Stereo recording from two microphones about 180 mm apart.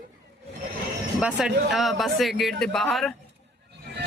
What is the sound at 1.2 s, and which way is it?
Speech, 5° right (ahead or behind).